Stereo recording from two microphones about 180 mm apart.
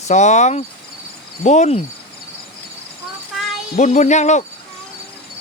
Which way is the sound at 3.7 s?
40° left (ahead or behind).